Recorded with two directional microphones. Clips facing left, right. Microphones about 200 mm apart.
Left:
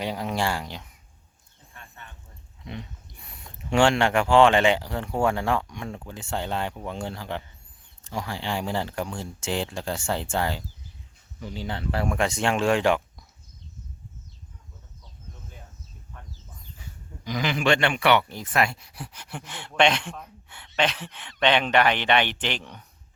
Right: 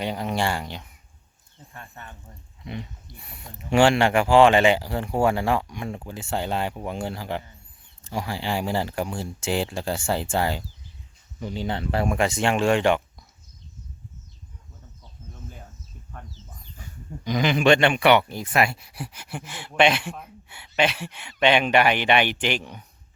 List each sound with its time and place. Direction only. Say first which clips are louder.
0.0 s speech: right 1 dB; centre (ahead or behind)
1.7 s a sound: right 5 dB; 40° right (ahead or behind)
3.7 s speech: right 2 dB; 5° right (ahead or behind)
11.4 s speech: right 4 dB; 20° right (ahead or behind)
12.1 s speech: right 1 dB; 5° right (ahead or behind)
17.2 s speech: right 5 dB; 20° right (ahead or behind)